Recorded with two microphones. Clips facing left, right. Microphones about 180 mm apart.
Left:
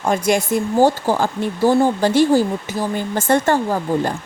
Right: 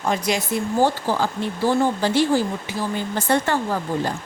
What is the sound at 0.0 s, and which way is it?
Speech, 50° left (ahead or behind).